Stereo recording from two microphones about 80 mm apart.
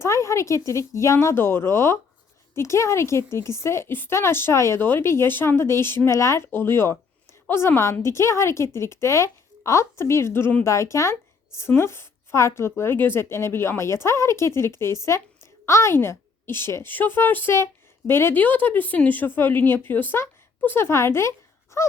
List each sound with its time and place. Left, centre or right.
0.0 s a woman's voice: left